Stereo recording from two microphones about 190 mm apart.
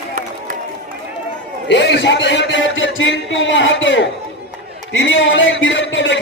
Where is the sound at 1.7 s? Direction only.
65° left (ahead or behind).